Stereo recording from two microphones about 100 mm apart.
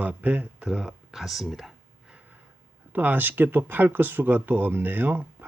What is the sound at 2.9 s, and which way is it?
Speech, 20° right (ahead or behind).